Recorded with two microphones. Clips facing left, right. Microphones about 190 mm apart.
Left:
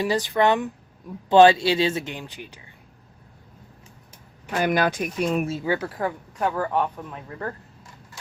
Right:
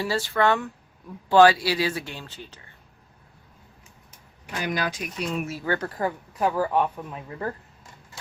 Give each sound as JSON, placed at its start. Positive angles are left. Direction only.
{"t": 0.0, "sound": "speech", "side_deg": 20}
{"t": 4.6, "sound": "speech", "side_deg": 55}
{"t": 5.6, "sound": "speech", "side_deg": 10}